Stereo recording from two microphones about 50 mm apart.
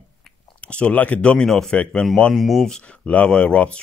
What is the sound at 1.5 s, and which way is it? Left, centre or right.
Speech, centre.